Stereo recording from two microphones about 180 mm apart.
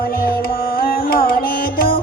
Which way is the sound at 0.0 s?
55° left (ahead or behind).